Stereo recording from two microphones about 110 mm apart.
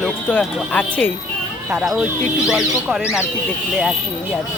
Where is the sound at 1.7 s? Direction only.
5° right (ahead or behind).